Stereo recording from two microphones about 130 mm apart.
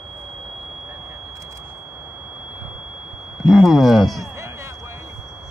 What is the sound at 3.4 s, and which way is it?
Speech, centre (ahead or behind).